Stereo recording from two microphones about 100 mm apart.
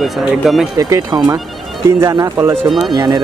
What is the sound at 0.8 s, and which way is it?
Speech, 40° right (ahead or behind).